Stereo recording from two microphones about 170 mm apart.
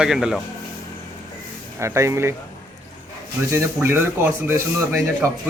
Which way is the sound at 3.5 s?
15° right (ahead or behind).